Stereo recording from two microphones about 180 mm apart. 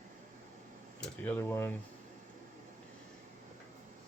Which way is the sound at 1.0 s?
10° left (ahead or behind).